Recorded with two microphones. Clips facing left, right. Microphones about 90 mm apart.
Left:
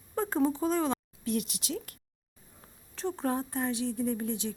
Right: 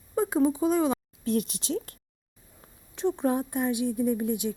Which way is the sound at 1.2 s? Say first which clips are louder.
Right 5 dB; 40° right (ahead or behind).